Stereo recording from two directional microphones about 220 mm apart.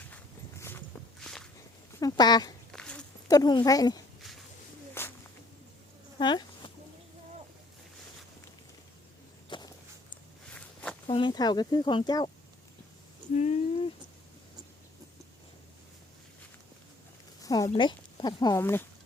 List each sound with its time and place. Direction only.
0.6 s walk: 10° left (ahead or behind)
2.0 s speech: 15° left (ahead or behind)
2.7 s a sound: 5° left (ahead or behind)
3.2 s speech: 15° left (ahead or behind)
5.0 s a sound: 10° left (ahead or behind)
6.1 s a sound: 20° left (ahead or behind)
9.5 s walk: 20° left (ahead or behind)
10.5 s walk: 5° left (ahead or behind)
11.0 s speech: 20° left (ahead or behind)
13.3 s speech: 30° left (ahead or behind)
17.4 s a sound: 15° left (ahead or behind)
17.7 s speech: 20° left (ahead or behind)